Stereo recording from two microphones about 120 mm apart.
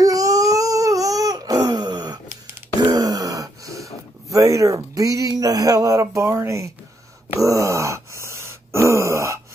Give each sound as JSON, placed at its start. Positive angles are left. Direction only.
{"t": 0.0, "sound": "crying", "side_deg": -30}
{"t": 2.8, "sound": "a sound", "side_deg": -35}
{"t": 7.3, "sound": "wail", "side_deg": -25}